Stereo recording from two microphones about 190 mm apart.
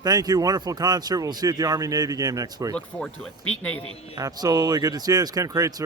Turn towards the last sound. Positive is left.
turn(degrees=-20)  # may be behind; listen again after turning